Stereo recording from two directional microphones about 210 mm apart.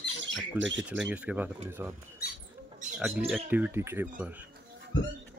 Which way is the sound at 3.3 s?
5° right (ahead or behind).